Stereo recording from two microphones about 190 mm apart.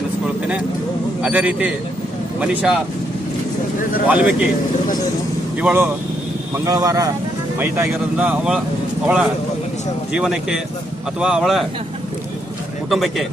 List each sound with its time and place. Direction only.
1.2 s speech: 5° right (ahead or behind)
4.1 s speech: 10° right (ahead or behind)
5.6 s speech: 10° right (ahead or behind)